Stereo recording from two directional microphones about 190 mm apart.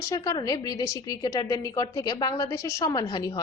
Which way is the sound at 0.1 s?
20° left (ahead or behind).